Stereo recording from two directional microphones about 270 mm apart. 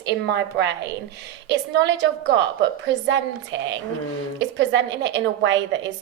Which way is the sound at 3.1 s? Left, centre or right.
Right.